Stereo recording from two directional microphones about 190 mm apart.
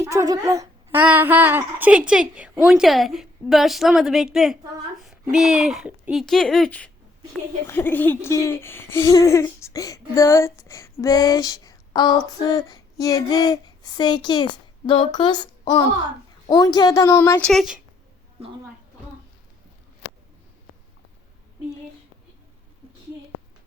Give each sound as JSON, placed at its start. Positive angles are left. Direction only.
{"t": 0.0, "sound": "a child's voice", "side_deg": -15}